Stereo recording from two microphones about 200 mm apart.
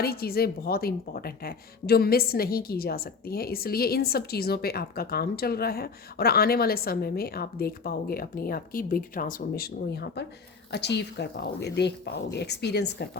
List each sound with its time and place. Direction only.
0.0 s a woman's voice: 50° left (ahead or behind)